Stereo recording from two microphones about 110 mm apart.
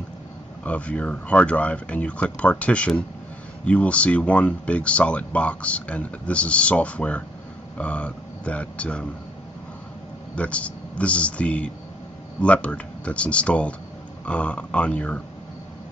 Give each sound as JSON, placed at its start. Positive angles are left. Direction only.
{"t": 0.7, "sound": "speech", "side_deg": 10}
{"t": 10.3, "sound": "speech", "side_deg": 10}